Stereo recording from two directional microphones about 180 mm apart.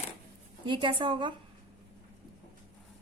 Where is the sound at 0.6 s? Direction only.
25° right (ahead or behind).